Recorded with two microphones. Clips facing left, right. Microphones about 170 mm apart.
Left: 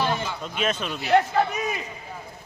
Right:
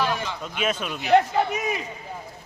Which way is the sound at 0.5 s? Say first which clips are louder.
Even; 10° right (ahead or behind).